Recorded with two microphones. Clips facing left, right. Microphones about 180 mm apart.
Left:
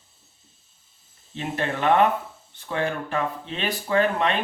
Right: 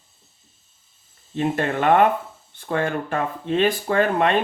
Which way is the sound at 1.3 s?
50° right (ahead or behind).